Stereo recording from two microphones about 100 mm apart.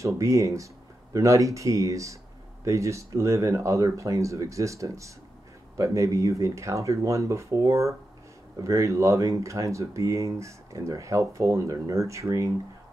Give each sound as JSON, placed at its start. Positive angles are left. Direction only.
{"t": 0.0, "sound": "speech", "side_deg": -30}